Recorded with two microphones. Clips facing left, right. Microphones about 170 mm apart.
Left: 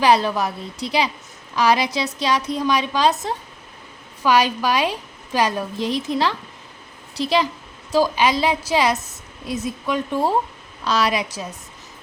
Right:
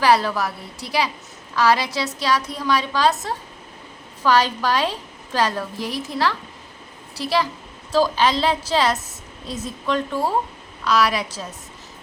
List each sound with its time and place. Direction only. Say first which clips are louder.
0.0 s a woman's voice: left 1 dB; 20° left (ahead or behind)
10.8 s a woman's voice: right 1 dB; 25° left (ahead or behind)